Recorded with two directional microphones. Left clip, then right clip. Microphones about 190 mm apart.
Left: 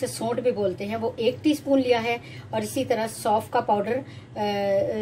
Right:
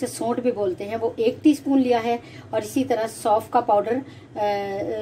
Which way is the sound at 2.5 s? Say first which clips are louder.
Right 2 dB; 30° right (ahead or behind).